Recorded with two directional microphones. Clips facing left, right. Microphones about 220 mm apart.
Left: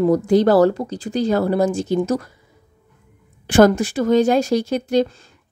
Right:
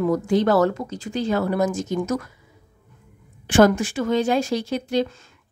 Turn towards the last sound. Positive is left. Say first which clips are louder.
# left 4 dB
turn(degrees=45)  # may be behind; listen again after turning